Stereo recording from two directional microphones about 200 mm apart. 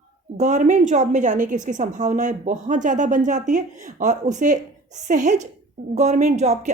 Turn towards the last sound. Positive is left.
turn(degrees=-35)  # may be behind; listen again after turning